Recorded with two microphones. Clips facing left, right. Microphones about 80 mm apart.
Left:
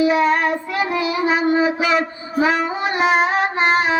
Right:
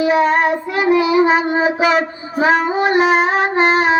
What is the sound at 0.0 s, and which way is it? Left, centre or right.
Child singing, right.